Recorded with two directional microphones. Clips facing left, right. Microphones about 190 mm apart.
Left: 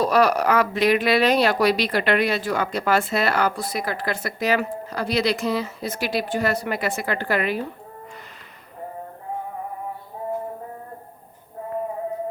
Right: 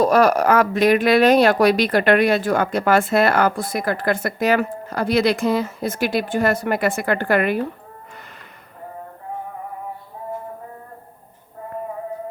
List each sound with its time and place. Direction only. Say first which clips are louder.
0.0 s speech: right 3 dB; 45° right (ahead or behind)